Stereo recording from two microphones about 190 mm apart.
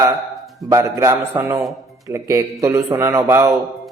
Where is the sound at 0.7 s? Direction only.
15° right (ahead or behind).